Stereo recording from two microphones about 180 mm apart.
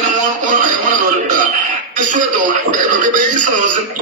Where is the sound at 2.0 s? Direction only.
45° right (ahead or behind).